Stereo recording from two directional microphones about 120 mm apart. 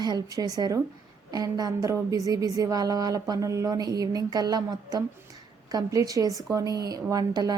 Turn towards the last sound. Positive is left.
turn(degrees=-35)  # may be behind; listen again after turning